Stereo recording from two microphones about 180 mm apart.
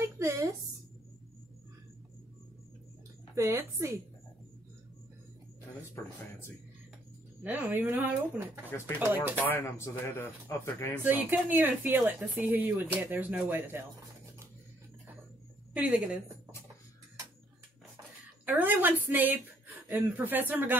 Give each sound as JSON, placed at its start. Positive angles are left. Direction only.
{"t": 0.0, "sound": "a sound", "side_deg": -15}
{"t": 3.3, "sound": "speech", "side_deg": -15}
{"t": 7.4, "sound": "speech", "side_deg": -10}
{"t": 8.6, "sound": "speech", "side_deg": 15}
{"t": 9.0, "sound": "speech", "side_deg": -10}
{"t": 9.5, "sound": "speech", "side_deg": 15}
{"t": 11.0, "sound": "speech", "side_deg": -10}
{"t": 15.7, "sound": "a woman's voice", "side_deg": -5}
{"t": 18.4, "sound": "a woman's voice", "side_deg": -10}